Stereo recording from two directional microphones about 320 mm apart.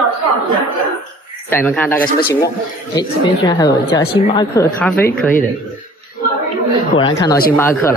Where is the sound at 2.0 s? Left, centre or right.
Left.